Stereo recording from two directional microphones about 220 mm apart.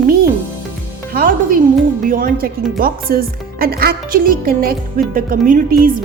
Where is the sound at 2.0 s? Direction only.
40° right (ahead or behind).